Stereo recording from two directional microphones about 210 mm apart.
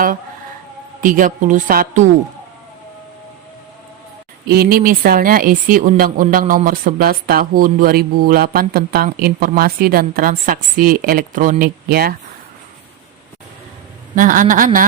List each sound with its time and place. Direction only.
1.0 s a woman's voice: 40° right (ahead or behind)
4.4 s speech: 45° right (ahead or behind)
14.2 s a woman's voice: 40° right (ahead or behind)